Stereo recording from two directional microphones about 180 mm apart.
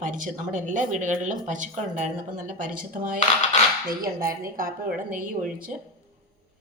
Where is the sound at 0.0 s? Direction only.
45° right (ahead or behind).